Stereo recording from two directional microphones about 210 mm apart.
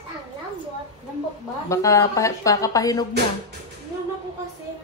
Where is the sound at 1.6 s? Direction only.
15° left (ahead or behind).